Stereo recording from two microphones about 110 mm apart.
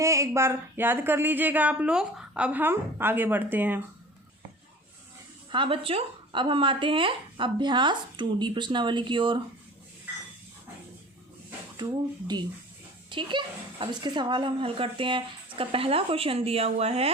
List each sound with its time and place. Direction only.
0.0 s speech: 25° right (ahead or behind)
5.5 s speech: 50° right (ahead or behind)
11.8 s a woman's voice: 40° right (ahead or behind); by 17.1 s 70° right (ahead or behind)